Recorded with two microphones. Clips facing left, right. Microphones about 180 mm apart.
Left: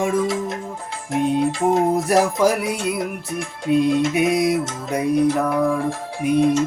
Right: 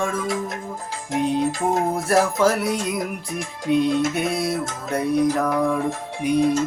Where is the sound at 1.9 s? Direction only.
15° left (ahead or behind).